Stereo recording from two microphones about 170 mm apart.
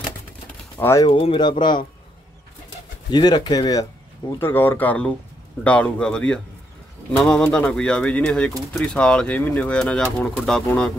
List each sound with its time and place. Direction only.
0.7 s speech: 15° left (ahead or behind)
1.0 s speech: 30° left (ahead or behind)
3.1 s speech: 25° left (ahead or behind); by 10.9 s 5° left (ahead or behind)